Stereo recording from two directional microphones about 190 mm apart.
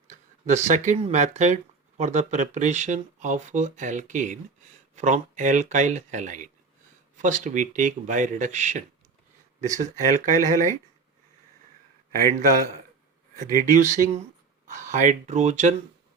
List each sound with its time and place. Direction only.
0.1 s speech: 40° right (ahead or behind)
13.4 s speech: 45° right (ahead or behind)